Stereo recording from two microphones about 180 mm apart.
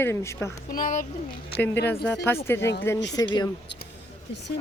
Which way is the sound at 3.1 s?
20° left (ahead or behind).